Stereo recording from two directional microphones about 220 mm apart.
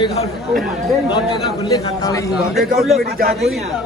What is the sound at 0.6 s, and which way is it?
Speech, centre (ahead or behind).